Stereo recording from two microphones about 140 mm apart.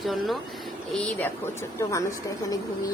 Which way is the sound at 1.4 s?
20° left (ahead or behind).